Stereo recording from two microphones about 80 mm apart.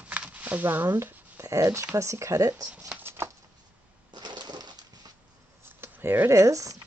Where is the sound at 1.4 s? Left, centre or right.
Right.